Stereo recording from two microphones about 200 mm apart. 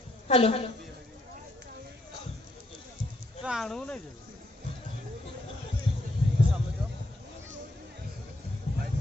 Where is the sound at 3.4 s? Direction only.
Centre (ahead or behind).